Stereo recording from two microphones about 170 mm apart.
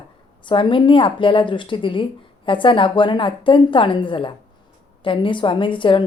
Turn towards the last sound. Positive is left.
turn(degrees=30)  # may be behind; listen again after turning